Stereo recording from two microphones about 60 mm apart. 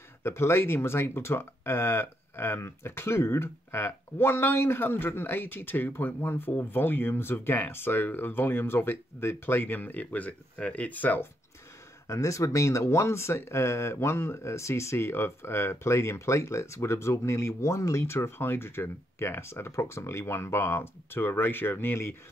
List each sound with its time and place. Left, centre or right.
0.2 s speech: left
12.1 s speech: left